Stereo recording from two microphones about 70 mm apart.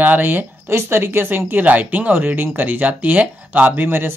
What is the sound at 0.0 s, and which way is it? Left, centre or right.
Speech, right.